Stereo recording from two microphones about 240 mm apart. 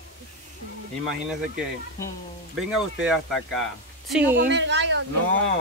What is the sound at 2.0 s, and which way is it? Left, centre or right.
Speech, centre.